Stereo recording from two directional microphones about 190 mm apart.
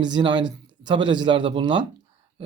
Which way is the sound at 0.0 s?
25° right (ahead or behind).